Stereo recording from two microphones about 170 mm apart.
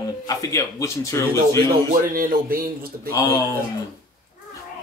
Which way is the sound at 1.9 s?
55° right (ahead or behind).